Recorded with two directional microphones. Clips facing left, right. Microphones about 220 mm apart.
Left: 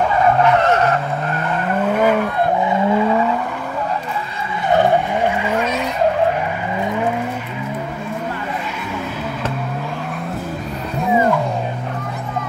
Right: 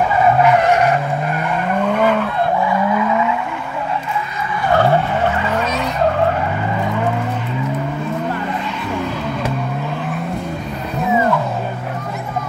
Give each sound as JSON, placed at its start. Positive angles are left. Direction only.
{"t": 0.4, "sound": "skidding", "side_deg": -10}
{"t": 1.9, "sound": "vehicle", "side_deg": 10}
{"t": 2.6, "sound": "vehicle", "side_deg": 25}
{"t": 4.6, "sound": "skidding", "side_deg": 20}